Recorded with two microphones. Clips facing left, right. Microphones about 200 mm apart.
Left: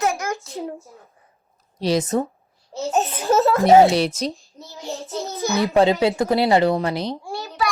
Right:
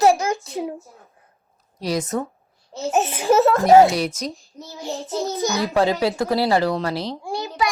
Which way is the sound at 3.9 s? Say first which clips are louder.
Left 3 dB; 30° left (ahead or behind).